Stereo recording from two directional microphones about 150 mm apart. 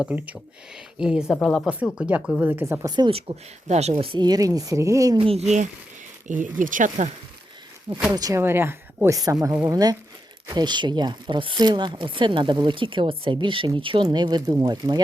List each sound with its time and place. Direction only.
0.0 s a woman's voice: 10° right (ahead or behind)
2.0 s speech: 5° right (ahead or behind)
5.1 s speech: 35° right (ahead or behind)
6.2 s speech: 60° right (ahead or behind)
7.9 s speech: 10° right (ahead or behind)
8.1 s speech: 25° right (ahead or behind)